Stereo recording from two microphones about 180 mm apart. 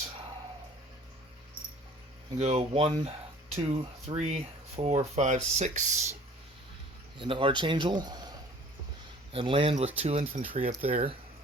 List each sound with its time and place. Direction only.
2.4 s speech: 35° right (ahead or behind)
7.2 s a man's voice: 30° right (ahead or behind)
9.3 s speech: 30° right (ahead or behind)